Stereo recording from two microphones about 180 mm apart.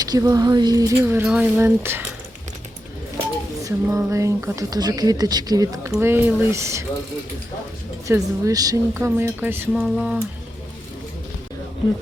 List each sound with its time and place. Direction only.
0.0 s speech: 20° right (ahead or behind)
3.6 s speech: 15° right (ahead or behind)
8.0 s speech: 20° right (ahead or behind)